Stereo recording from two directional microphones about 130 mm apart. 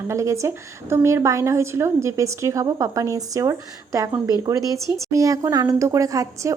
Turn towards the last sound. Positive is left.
turn(degrees=-25)  # may be behind; listen again after turning